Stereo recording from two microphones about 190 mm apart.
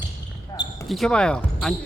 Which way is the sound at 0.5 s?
15° left (ahead or behind).